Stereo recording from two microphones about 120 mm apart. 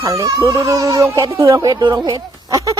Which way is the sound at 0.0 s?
25° right (ahead or behind).